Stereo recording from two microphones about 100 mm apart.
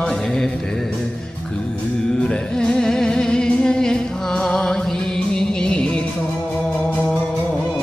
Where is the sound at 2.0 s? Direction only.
5° left (ahead or behind).